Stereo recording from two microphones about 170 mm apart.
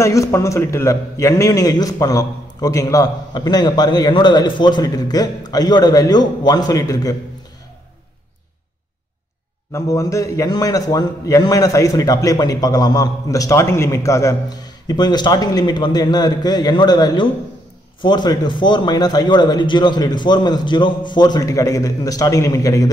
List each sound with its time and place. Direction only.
0.0 s a man's voice: 20° left (ahead or behind)
9.7 s a man's voice: 15° left (ahead or behind)